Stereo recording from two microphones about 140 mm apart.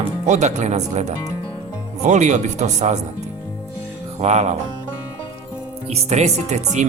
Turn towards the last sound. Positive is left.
turn(degrees=-55)  # may be behind; listen again after turning